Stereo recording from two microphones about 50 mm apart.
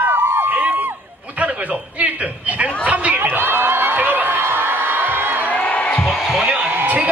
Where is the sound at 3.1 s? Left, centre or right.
Right.